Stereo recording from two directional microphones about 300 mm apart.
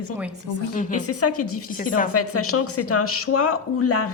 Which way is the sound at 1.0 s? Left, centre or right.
Left.